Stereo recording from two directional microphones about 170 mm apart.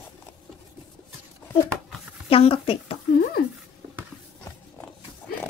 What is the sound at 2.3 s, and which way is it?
Speech, 35° left (ahead or behind).